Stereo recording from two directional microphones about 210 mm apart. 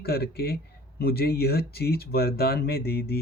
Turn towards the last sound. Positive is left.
turn(degrees=50)  # may be behind; listen again after turning